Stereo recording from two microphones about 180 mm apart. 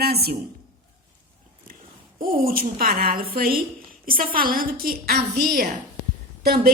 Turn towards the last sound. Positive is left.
turn(degrees=-60)  # may be behind; listen again after turning